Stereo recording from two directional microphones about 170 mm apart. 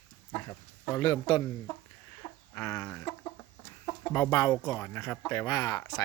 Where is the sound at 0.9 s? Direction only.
25° left (ahead or behind).